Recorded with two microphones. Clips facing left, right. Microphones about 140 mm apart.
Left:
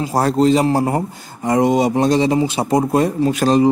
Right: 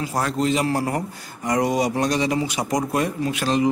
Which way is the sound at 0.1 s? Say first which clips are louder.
Left 9 dB; 35° left (ahead or behind).